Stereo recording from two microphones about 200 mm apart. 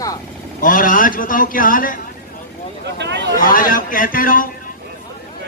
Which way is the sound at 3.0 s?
60° right (ahead or behind).